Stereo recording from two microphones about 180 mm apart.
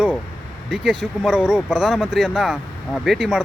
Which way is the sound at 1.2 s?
5° right (ahead or behind).